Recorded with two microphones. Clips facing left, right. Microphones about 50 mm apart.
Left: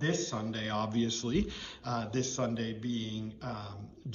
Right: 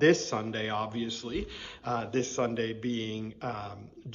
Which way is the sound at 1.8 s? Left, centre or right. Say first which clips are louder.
Right 4 dB; right.